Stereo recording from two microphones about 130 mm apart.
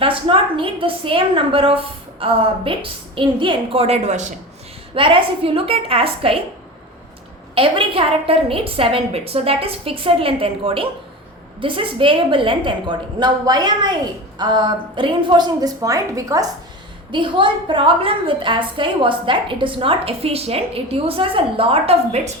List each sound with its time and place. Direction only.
0.0 s a woman's voice: 40° right (ahead or behind); by 4.3 s 65° right (ahead or behind)
4.9 s a woman's voice: 40° right (ahead or behind)
7.5 s a woman's voice: 45° right (ahead or behind); by 16.5 s 25° right (ahead or behind)
17.1 s a woman's voice: 40° right (ahead or behind)